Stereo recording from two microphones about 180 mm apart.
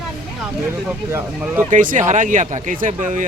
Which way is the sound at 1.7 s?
45° right (ahead or behind).